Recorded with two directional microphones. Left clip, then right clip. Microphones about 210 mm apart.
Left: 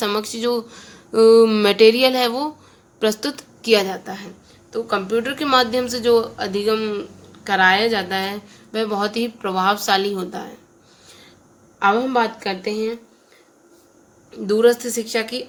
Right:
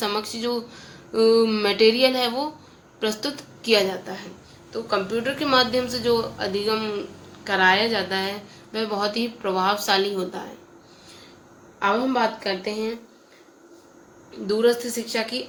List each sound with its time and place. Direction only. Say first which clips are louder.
0.0 s a woman's voice: left 4 dB; 55° left (ahead or behind)
11.8 s a woman's voice: left 4 dB; 55° left (ahead or behind)
14.4 s speech: left 5 dB; 55° left (ahead or behind)